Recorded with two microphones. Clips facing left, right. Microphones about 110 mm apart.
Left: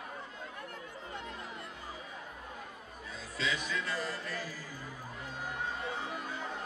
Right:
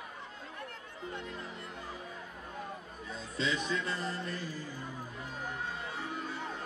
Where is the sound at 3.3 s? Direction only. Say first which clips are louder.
Right 2 dB; 25° right (ahead or behind).